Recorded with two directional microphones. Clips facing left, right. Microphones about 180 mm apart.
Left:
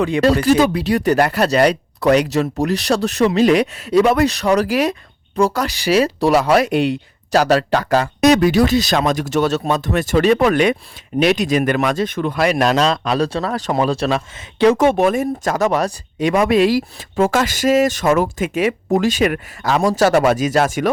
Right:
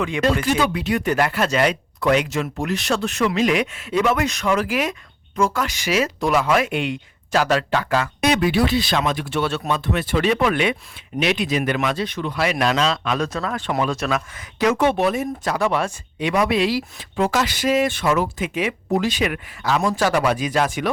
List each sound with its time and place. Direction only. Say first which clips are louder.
0.0 s speech: left 5 dB; 35° left (ahead or behind)
14.8 s speech: left 4 dB; 45° left (ahead or behind)